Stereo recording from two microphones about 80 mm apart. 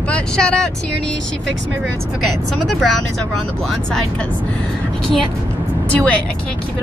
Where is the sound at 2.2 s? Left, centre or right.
Centre.